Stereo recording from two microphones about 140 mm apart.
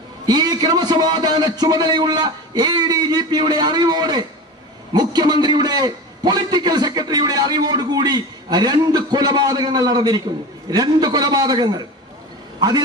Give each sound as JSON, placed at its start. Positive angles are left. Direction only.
{"t": 0.3, "sound": "a man's voice", "side_deg": -30}